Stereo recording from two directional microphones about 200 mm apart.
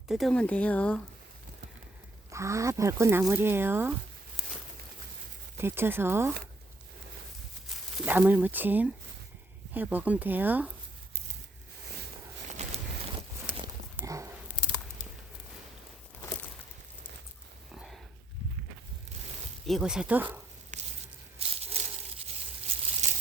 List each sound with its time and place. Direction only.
0.1 s speech: centre (ahead or behind)
2.3 s speech: 15° right (ahead or behind)
5.5 s speech: 10° right (ahead or behind)
7.7 s speech: 10° right (ahead or behind)
12.5 s a sound: 30° right (ahead or behind)
13.9 s dog: 15° right (ahead or behind)
17.7 s a sound: centre (ahead or behind)
19.6 s speech: centre (ahead or behind)
20.7 s a sound: 35° right (ahead or behind)